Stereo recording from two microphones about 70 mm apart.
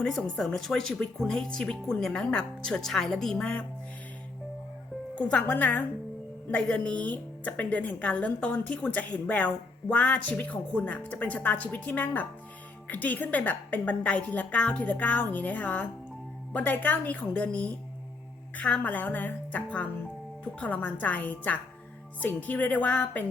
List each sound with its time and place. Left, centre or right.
0.0 s speech: centre
5.1 s a woman's voice: centre